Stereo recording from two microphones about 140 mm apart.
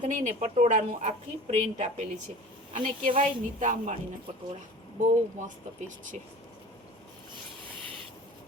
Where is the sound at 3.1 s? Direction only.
60° right (ahead or behind).